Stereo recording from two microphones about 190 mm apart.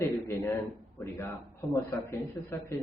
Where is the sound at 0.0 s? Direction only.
10° left (ahead or behind).